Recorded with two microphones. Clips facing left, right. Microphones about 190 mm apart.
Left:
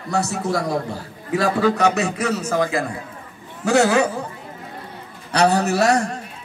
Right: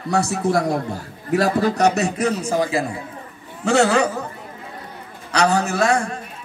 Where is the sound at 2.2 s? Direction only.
15° right (ahead or behind).